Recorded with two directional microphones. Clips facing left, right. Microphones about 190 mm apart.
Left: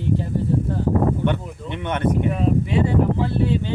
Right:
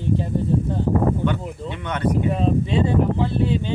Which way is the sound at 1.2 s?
25° left (ahead or behind).